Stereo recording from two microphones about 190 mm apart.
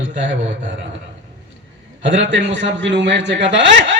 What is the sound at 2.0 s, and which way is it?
A man's voice, 75° right (ahead or behind).